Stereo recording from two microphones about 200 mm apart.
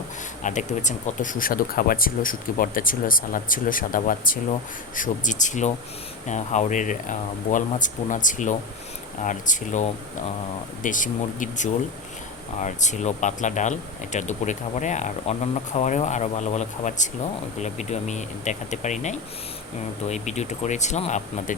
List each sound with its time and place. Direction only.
0.4 s speech: 35° left (ahead or behind)